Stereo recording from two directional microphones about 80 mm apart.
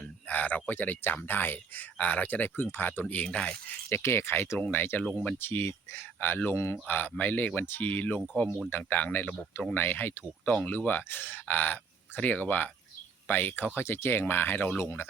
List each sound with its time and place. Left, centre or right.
0.0 s speech: centre
3.8 s speech: left
4.5 s speech: centre